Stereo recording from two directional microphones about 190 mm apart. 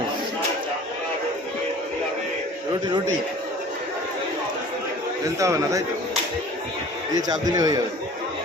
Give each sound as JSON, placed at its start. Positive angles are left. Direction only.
{"t": 5.4, "sound": "a man's voice", "side_deg": -15}
{"t": 7.3, "sound": "a man's voice", "side_deg": -20}